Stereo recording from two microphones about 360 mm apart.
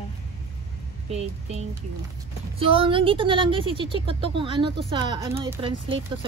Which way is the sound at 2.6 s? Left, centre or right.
Centre.